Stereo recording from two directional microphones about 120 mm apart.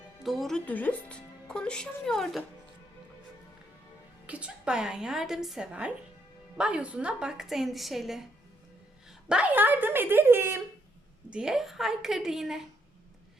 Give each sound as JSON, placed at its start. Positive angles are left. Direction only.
{"t": 0.2, "sound": "speech", "side_deg": 0}
{"t": 4.3, "sound": "a woman's voice", "side_deg": -10}
{"t": 9.3, "sound": "speech", "side_deg": -10}
{"t": 11.3, "sound": "a woman's voice", "side_deg": -5}